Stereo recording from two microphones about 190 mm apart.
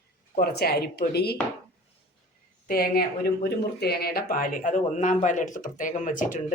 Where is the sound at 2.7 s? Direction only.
55° left (ahead or behind).